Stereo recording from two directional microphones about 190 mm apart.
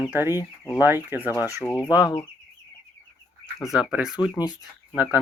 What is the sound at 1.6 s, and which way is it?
Speech, 10° left (ahead or behind).